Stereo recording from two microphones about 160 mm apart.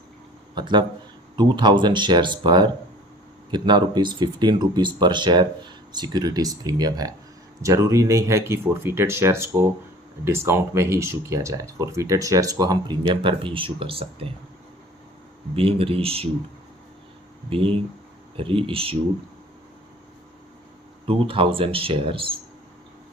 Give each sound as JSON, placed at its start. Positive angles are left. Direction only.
{"t": 0.5, "sound": "speech", "side_deg": -30}
{"t": 15.5, "sound": "speech", "side_deg": -35}
{"t": 17.5, "sound": "speech", "side_deg": -35}
{"t": 21.1, "sound": "speech", "side_deg": -35}